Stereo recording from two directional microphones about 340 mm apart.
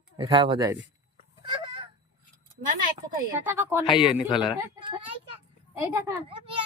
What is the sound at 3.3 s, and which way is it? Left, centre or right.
Speech, centre.